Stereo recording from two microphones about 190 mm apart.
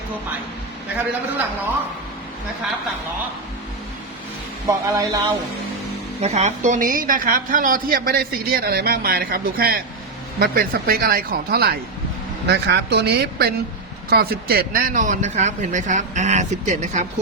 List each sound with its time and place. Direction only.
4.6 s speech: 20° right (ahead or behind)
6.2 s a woman's voice: 35° right (ahead or behind)